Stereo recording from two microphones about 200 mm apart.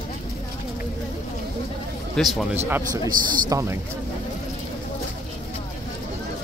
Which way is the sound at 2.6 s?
10° right (ahead or behind).